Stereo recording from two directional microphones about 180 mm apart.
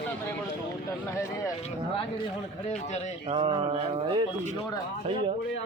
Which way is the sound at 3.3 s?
30° right (ahead or behind).